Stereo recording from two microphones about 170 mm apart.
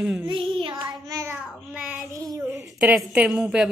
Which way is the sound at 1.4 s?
5° right (ahead or behind).